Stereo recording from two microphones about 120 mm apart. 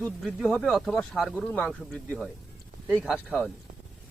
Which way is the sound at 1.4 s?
10° left (ahead or behind).